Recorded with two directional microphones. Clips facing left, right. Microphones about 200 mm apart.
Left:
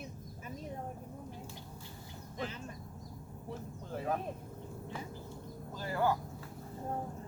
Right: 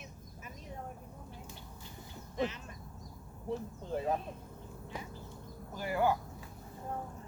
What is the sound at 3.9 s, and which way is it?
Speech, 20° right (ahead or behind).